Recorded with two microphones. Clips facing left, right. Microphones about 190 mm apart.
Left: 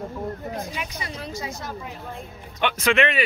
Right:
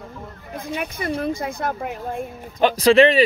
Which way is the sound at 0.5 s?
55° right (ahead or behind).